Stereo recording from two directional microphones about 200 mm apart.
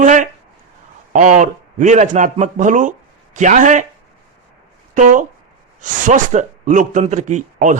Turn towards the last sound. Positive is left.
turn(degrees=-40)  # may be behind; listen again after turning